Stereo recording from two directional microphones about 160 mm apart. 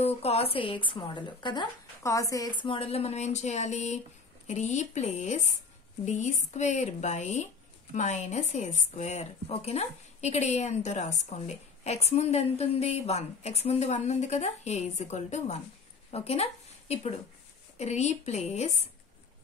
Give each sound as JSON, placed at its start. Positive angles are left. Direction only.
{"t": 0.0, "sound": "a woman's voice", "side_deg": 40}